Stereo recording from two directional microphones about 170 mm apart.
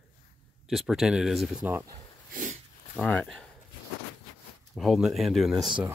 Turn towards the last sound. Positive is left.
turn(degrees=0)  # may be behind; listen again after turning